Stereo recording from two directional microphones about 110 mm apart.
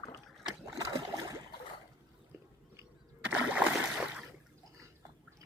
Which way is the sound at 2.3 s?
25° right (ahead or behind).